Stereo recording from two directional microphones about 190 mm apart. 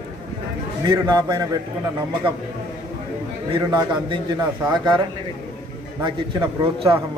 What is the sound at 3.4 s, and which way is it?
A man's voice, 25° right (ahead or behind).